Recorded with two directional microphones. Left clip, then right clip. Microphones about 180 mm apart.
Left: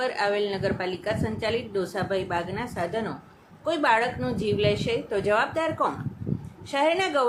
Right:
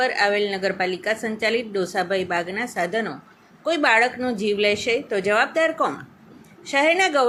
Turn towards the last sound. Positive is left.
turn(degrees=-15)  # may be behind; listen again after turning